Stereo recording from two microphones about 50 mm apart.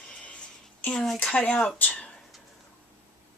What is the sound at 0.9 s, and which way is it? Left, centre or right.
Speech, centre.